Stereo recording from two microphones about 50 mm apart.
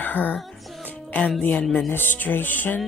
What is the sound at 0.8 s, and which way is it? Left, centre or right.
Music, left.